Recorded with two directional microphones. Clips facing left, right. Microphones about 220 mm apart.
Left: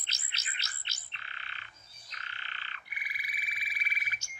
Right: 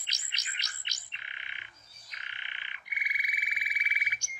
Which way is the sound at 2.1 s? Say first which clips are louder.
Left 2 dB; 15° right (ahead or behind).